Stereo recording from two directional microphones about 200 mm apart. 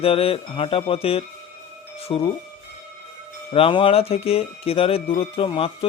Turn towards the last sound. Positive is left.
turn(degrees=25)  # may be behind; listen again after turning